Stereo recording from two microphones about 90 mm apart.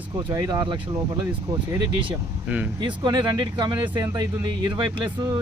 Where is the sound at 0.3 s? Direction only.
45° right (ahead or behind).